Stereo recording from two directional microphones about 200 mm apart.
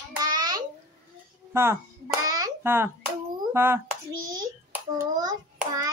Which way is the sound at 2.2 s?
20° right (ahead or behind).